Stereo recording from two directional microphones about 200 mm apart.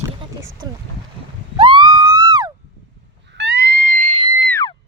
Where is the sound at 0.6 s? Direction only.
20° right (ahead or behind).